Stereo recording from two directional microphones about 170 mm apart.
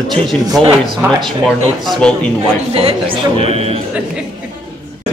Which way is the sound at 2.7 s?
35° right (ahead or behind).